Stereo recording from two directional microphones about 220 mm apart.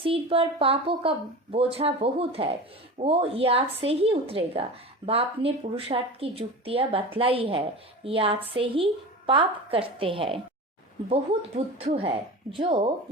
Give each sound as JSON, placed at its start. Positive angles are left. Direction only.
{"t": 0.0, "sound": "speech", "side_deg": -25}